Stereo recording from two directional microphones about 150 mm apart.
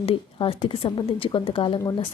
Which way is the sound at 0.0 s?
35° left (ahead or behind).